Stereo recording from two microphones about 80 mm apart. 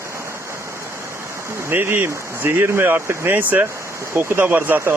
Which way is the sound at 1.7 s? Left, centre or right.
Right.